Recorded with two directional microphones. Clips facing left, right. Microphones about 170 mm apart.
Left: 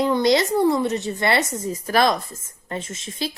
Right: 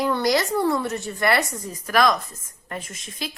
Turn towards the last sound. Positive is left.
turn(degrees=30)  # may be behind; listen again after turning